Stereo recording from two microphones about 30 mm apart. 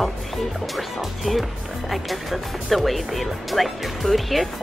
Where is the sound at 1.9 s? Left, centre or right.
Centre.